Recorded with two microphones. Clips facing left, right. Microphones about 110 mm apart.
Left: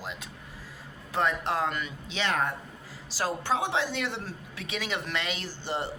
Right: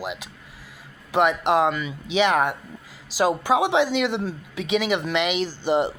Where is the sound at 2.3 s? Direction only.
85° right.